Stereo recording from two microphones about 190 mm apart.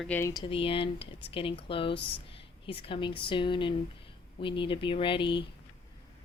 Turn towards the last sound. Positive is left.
turn(degrees=25)  # may be behind; listen again after turning